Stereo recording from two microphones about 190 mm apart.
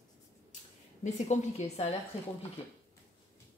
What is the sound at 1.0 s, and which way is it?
Speech, 40° left (ahead or behind).